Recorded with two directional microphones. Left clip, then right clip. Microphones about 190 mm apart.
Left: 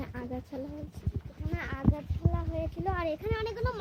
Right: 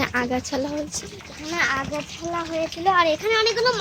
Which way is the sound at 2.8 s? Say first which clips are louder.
Right 15 dB; 30° left (ahead or behind).